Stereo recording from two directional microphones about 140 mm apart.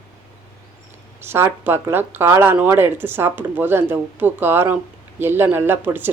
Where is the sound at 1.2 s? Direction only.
15° right (ahead or behind).